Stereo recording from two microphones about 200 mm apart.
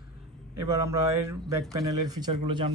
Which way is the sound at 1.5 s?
15° right (ahead or behind).